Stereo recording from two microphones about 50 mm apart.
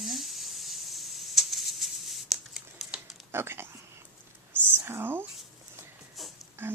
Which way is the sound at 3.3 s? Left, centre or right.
Right.